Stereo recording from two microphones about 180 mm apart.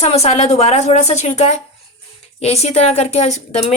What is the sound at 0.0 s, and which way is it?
A woman's voice, 35° left (ahead or behind).